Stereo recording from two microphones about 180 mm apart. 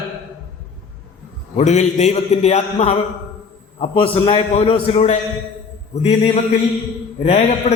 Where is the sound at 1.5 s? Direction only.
40° left (ahead or behind).